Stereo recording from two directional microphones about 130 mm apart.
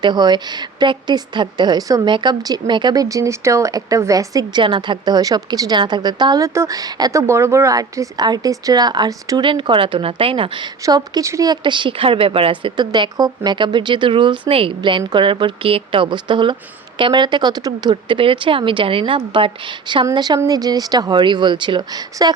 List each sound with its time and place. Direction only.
0.0 s speech: 35° right (ahead or behind)
4.6 s a woman's voice: 40° right (ahead or behind)
9.5 s speech: 40° right (ahead or behind)
10.8 s a woman's voice: 30° right (ahead or behind)
11.6 s speech: 40° right (ahead or behind)
17.9 s speech: 45° right (ahead or behind)